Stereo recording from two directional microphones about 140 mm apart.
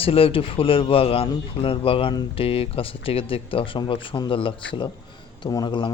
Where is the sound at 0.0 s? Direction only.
40° left (ahead or behind).